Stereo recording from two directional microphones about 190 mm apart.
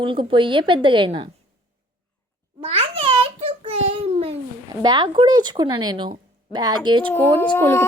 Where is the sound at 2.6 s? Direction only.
30° right (ahead or behind).